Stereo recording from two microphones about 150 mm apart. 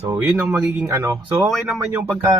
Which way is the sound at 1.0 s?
20° right (ahead or behind).